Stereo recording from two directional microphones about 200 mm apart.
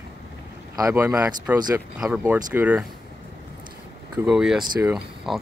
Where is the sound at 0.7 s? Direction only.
15° right (ahead or behind).